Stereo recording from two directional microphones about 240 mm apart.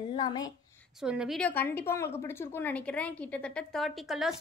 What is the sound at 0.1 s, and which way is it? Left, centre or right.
Speech, centre.